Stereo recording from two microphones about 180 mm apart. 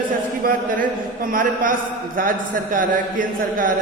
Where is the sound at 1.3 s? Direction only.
50° right (ahead or behind).